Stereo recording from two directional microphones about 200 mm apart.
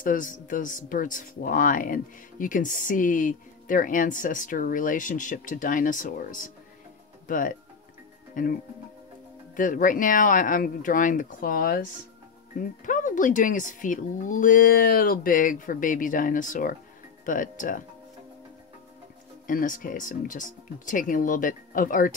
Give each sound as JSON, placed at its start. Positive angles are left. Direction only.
{"t": 0.0, "sound": "speech", "side_deg": 40}
{"t": 9.6, "sound": "speech", "side_deg": 40}
{"t": 19.4, "sound": "speech", "side_deg": 40}